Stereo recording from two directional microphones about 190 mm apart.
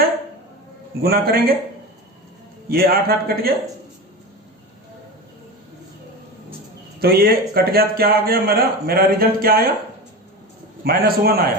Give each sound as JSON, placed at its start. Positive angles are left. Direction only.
{"t": 1.0, "sound": "a man's voice", "side_deg": -55}
{"t": 2.6, "sound": "a man's voice", "side_deg": -55}
{"t": 7.0, "sound": "a man's voice", "side_deg": -55}
{"t": 10.8, "sound": "a man's voice", "side_deg": -50}